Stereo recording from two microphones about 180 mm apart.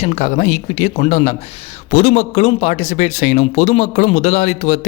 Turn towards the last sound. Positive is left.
turn(degrees=40)  # may be behind; listen again after turning